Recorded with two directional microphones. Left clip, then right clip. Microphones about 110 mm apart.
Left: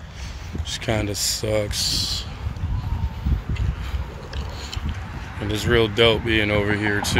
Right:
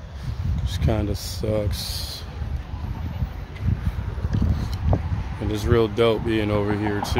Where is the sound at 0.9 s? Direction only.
25° right (ahead or behind).